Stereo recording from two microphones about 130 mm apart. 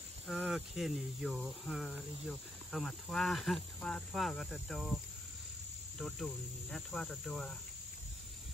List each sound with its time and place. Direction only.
0.5 s speech: centre (ahead or behind)